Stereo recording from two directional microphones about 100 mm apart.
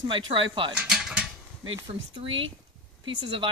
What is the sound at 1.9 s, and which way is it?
Speech, 75° right (ahead or behind).